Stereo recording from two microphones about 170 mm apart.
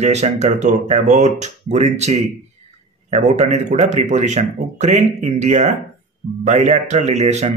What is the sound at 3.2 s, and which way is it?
Speech, 40° right (ahead or behind).